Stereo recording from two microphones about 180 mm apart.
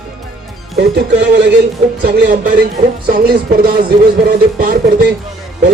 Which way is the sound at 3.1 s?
60° right (ahead or behind).